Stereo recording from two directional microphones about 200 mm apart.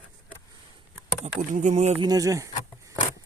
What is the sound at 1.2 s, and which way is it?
Speech, 40° right (ahead or behind).